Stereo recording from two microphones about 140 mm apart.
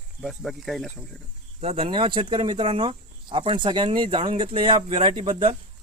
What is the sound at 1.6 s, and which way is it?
Speech, 40° right (ahead or behind).